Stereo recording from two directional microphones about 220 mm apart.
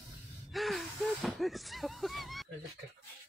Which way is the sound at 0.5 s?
Centre (ahead or behind).